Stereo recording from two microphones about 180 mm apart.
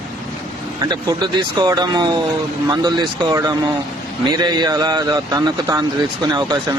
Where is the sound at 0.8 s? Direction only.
25° right (ahead or behind).